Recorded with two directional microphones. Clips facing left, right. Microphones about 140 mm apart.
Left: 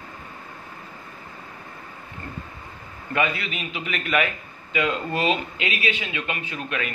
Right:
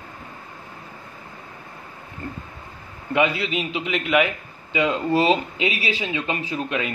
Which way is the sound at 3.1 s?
25° right (ahead or behind).